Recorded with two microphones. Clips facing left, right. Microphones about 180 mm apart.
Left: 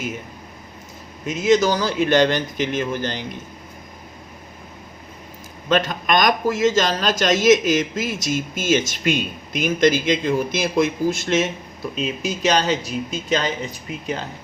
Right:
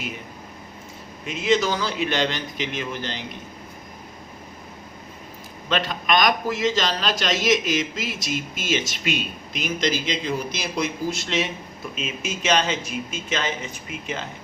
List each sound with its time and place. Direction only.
1.3 s a man's voice: 40° left (ahead or behind)
5.6 s a man's voice: 45° left (ahead or behind)